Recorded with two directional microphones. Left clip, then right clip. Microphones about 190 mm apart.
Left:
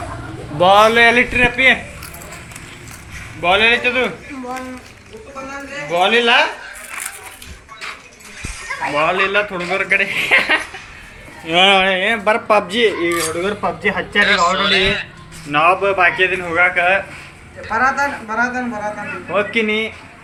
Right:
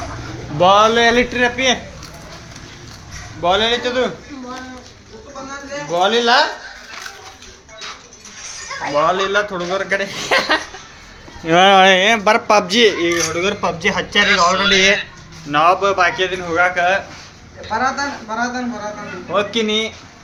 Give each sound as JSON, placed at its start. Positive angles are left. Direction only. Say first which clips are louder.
{"t": 0.6, "sound": "a man's voice", "louder": "left 1 dB", "side_deg": -5}
{"t": 3.4, "sound": "speech", "louder": "left 3 dB", "side_deg": -10}
{"t": 5.9, "sound": "speech", "louder": "left 1 dB", "side_deg": -10}
{"t": 9.0, "sound": "speech", "louder": "even", "side_deg": -10}
{"t": 11.4, "sound": "speech", "louder": "right 3 dB", "side_deg": -50}
{"t": 12.0, "sound": "speech", "louder": "right 2 dB", "side_deg": -30}
{"t": 13.1, "sound": "speech", "louder": "right 1 dB", "side_deg": -10}
{"t": 14.3, "sound": "a man's voice", "louder": "right 1 dB", "side_deg": 20}
{"t": 15.4, "sound": "a man's voice", "louder": "even", "side_deg": -5}
{"t": 19.5, "sound": "speech", "louder": "left 1 dB", "side_deg": -5}